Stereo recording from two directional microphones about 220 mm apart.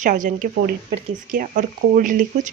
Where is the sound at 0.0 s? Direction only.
35° right (ahead or behind).